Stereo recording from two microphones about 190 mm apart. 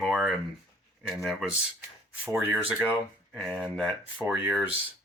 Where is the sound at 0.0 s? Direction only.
Centre (ahead or behind).